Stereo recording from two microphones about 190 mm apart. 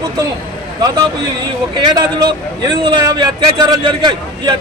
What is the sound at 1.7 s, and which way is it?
A man's voice, 20° right (ahead or behind).